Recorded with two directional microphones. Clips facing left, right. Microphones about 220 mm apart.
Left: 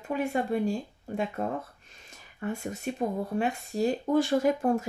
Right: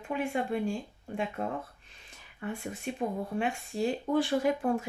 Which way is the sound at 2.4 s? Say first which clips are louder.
Left 3 dB; 45° left (ahead or behind).